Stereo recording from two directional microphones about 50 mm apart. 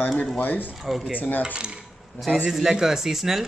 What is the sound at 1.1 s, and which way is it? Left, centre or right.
Speech, left.